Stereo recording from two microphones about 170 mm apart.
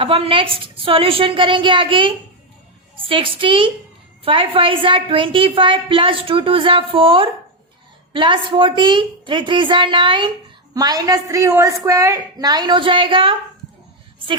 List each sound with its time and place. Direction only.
0.0 s a woman's voice: 35° right (ahead or behind)